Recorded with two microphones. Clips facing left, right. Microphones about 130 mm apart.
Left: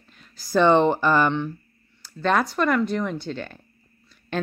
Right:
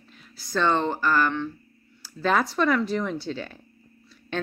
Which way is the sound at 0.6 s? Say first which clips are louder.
Left 6 dB; 20° left (ahead or behind).